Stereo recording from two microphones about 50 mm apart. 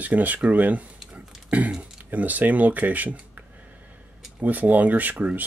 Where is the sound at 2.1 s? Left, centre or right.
Right.